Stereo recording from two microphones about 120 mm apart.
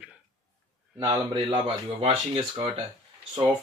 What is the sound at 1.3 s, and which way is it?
Speech, 50° right (ahead or behind).